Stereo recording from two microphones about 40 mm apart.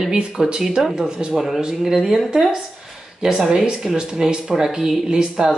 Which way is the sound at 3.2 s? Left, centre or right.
Right.